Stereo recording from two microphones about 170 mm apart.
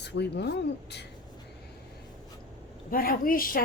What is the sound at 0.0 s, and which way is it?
Speech, 85° left.